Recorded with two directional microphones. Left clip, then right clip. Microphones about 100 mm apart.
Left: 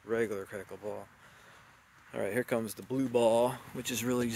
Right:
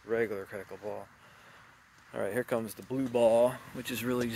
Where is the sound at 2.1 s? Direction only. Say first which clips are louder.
Even; 60° left (ahead or behind).